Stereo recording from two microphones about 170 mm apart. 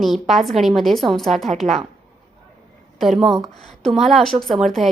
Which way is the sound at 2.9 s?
Centre (ahead or behind).